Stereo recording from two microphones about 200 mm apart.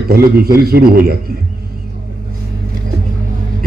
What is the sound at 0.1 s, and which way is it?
A man's voice, 50° right (ahead or behind).